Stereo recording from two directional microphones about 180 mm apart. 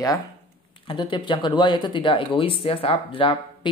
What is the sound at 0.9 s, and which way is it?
Speech, 25° left (ahead or behind).